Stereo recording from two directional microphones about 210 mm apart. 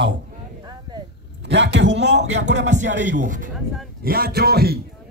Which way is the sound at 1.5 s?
55° right (ahead or behind).